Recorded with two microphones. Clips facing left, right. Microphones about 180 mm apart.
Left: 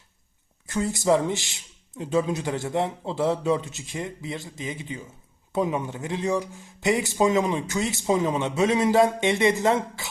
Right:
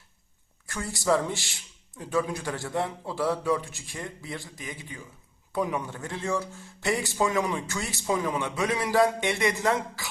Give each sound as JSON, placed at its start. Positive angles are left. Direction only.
{"t": 0.7, "sound": "speech", "side_deg": 20}